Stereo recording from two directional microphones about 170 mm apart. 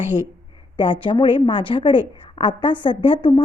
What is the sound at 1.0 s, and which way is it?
A woman's voice, 30° left (ahead or behind).